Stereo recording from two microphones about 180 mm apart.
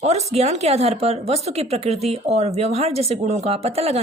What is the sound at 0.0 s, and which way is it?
Speech, 35° right (ahead or behind).